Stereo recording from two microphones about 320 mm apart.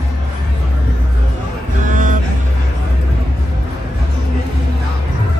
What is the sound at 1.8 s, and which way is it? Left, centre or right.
Music, right.